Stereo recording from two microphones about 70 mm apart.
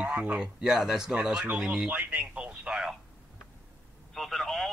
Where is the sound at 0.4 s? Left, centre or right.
Centre.